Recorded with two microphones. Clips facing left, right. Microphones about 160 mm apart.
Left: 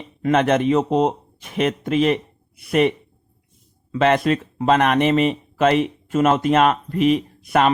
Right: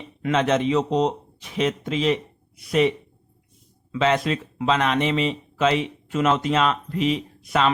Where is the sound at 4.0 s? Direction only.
50° left (ahead or behind).